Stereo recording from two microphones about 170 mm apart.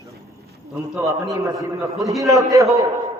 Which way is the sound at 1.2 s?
20° right (ahead or behind).